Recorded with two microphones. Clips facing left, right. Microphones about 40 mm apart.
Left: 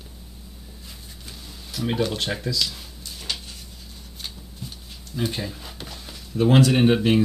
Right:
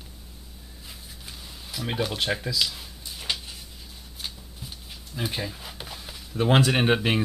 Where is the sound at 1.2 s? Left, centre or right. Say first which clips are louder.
Left 1 dB; centre.